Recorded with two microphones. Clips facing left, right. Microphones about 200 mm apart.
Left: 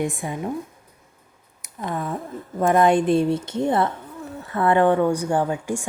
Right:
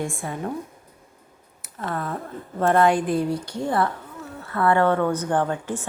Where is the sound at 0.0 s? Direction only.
20° left (ahead or behind).